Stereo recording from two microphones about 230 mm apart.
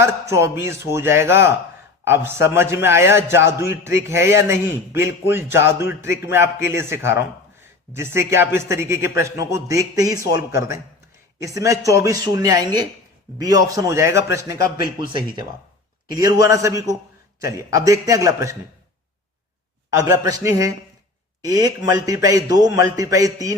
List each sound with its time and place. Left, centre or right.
0.0 s a man's voice: centre
16.1 s a man's voice: centre
20.1 s a man's voice: centre